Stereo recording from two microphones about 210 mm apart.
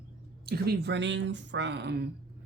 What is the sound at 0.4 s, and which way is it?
Speech, 50° right (ahead or behind).